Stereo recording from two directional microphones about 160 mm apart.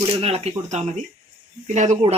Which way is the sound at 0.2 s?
40° right (ahead or behind).